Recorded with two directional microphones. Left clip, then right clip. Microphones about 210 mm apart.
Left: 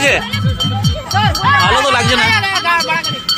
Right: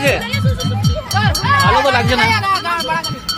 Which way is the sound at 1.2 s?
50° right (ahead or behind).